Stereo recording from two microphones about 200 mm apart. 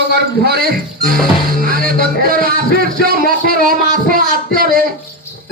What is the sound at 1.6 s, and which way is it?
Music, 45° right (ahead or behind).